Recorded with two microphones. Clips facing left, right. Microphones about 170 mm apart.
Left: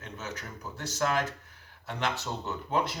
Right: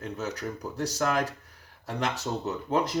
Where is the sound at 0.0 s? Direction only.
35° right (ahead or behind).